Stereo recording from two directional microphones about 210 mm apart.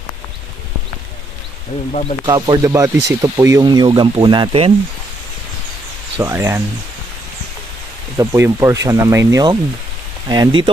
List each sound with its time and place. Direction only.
1.9 s speech: 30° left (ahead or behind)
2.2 s speech: 20° right (ahead or behind)
6.2 s speech: 10° right (ahead or behind)
8.2 s speech: 15° right (ahead or behind)